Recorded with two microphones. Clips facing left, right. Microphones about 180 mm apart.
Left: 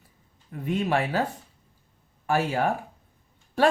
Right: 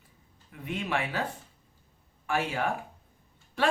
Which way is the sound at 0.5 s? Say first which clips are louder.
Left 7 dB; 40° left (ahead or behind).